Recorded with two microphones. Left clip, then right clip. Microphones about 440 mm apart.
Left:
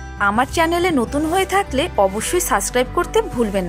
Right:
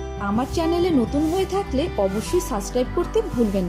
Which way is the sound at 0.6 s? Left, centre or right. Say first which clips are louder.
Left 4 dB; centre.